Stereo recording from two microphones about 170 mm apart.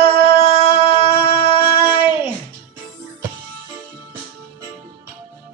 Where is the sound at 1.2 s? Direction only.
30° left (ahead or behind).